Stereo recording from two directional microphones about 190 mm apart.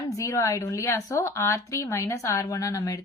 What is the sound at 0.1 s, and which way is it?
A woman's voice, 15° left (ahead or behind).